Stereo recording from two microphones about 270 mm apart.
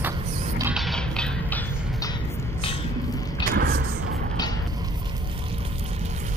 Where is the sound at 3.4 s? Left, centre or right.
Right.